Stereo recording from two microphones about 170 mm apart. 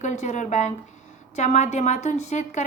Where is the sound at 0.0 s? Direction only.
45° left (ahead or behind).